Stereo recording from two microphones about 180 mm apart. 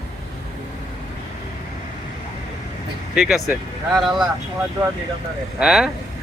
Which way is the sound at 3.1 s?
5° right (ahead or behind).